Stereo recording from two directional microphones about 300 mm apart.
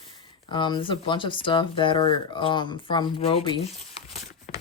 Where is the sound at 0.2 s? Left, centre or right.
Centre.